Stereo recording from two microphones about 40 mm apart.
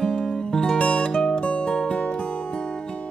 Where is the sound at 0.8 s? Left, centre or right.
Left.